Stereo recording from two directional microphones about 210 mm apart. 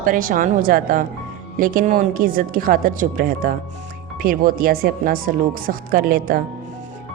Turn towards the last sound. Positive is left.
turn(degrees=-45)  # may be behind; listen again after turning